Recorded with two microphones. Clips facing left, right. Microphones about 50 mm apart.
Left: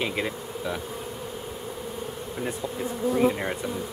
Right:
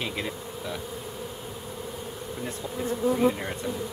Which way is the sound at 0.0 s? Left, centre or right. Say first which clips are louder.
Left 3 dB; centre.